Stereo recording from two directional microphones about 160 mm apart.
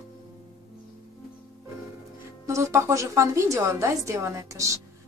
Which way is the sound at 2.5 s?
20° right (ahead or behind).